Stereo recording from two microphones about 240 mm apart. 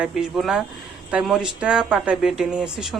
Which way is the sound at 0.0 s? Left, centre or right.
Centre.